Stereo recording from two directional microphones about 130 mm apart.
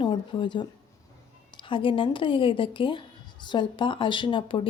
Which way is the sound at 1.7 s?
40° left (ahead or behind).